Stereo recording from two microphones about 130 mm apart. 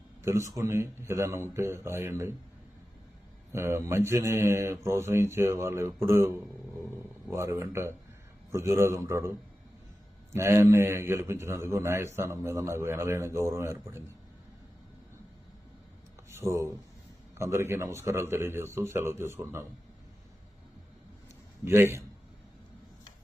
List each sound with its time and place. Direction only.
0.2 s a man's voice: 20° right (ahead or behind)
3.5 s a man's voice: 20° right (ahead or behind)
10.3 s a man's voice: 20° right (ahead or behind)
16.3 s a man's voice: 20° right (ahead or behind)
21.6 s a man's voice: 20° right (ahead or behind)